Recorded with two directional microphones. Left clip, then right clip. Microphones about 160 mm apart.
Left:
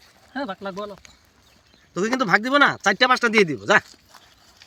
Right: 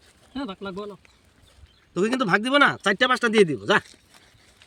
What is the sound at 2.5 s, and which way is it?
Speech, 25° right (ahead or behind).